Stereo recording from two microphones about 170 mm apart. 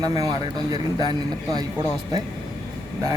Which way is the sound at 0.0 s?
20° right (ahead or behind).